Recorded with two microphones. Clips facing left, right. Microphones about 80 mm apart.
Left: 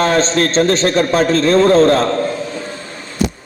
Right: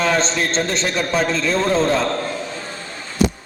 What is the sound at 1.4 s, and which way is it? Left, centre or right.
Speech, left.